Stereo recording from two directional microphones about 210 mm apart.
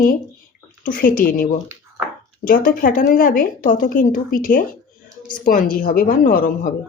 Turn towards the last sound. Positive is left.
turn(degrees=40)  # may be behind; listen again after turning